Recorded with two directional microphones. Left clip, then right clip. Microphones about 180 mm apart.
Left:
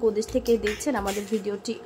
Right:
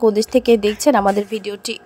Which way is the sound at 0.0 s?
45° right (ahead or behind).